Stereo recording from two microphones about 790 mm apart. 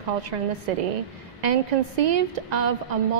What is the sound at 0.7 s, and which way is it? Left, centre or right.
A woman's voice, right.